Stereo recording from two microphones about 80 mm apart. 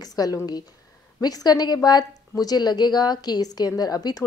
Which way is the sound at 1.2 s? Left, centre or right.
Left.